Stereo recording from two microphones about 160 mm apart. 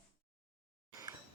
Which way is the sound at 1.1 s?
20° right (ahead or behind).